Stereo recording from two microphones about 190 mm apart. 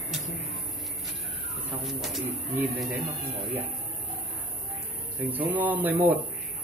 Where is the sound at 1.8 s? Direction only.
Centre (ahead or behind).